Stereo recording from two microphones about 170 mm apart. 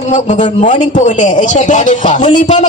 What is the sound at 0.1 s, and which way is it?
Speech, 45° left (ahead or behind).